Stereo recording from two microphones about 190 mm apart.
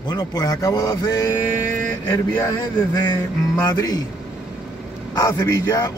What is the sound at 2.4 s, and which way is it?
A man's voice, 20° left (ahead or behind).